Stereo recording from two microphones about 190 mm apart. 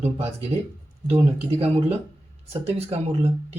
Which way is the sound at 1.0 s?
30° right (ahead or behind).